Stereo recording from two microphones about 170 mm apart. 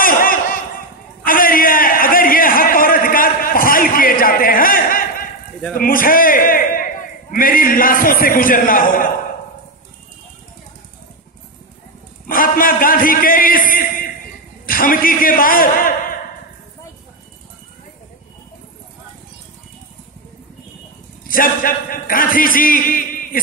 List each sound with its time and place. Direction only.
0.0 s a sound: 55° left (ahead or behind)
5.8 s a man's voice: 55° left (ahead or behind)
12.3 s a man's voice: 55° left (ahead or behind)
21.3 s a man's voice: 55° left (ahead or behind)